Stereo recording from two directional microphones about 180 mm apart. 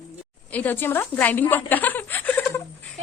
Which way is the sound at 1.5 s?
10° left (ahead or behind).